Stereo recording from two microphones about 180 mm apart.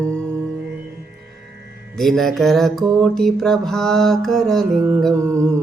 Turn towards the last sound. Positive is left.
turn(degrees=-15)  # may be behind; listen again after turning